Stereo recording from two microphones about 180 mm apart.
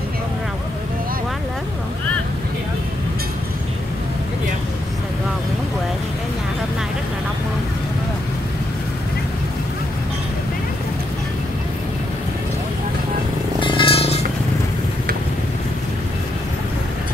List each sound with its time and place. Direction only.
13.6 s vehicle: 30° left (ahead or behind)